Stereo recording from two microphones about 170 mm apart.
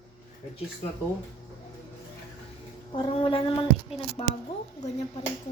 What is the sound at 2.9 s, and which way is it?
Speech, 30° left (ahead or behind).